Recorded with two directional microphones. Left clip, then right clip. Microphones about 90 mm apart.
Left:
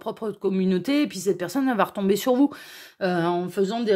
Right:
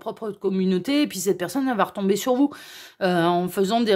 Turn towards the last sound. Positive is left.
turn(degrees=-60)  # may be behind; listen again after turning